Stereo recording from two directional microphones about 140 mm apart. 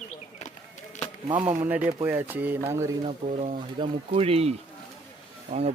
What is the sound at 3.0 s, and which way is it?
Speech, 50° right (ahead or behind).